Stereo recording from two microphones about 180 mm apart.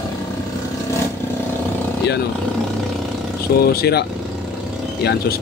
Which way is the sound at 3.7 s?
65° left (ahead or behind).